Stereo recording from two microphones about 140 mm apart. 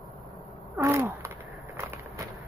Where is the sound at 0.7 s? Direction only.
15° right (ahead or behind).